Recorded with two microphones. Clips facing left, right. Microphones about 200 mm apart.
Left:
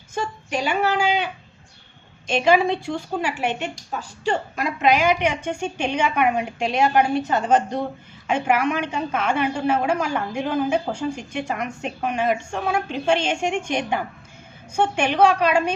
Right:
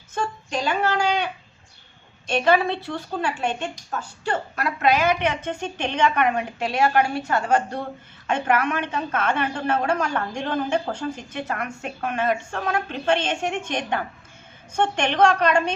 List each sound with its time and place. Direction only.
0.1 s a woman's voice: 10° left (ahead or behind)